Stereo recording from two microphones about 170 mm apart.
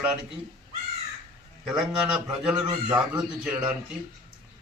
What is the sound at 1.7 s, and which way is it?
A man's voice, 5° right (ahead or behind).